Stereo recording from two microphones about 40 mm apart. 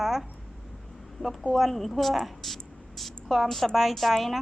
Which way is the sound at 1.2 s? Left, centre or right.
Left.